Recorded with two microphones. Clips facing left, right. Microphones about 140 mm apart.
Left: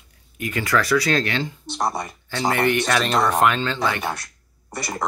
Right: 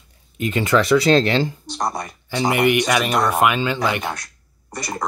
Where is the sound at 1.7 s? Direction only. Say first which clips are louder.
Even; centre (ahead or behind).